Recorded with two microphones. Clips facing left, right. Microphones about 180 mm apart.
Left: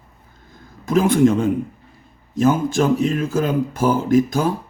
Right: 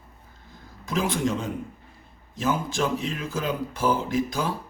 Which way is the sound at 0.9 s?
50° left (ahead or behind).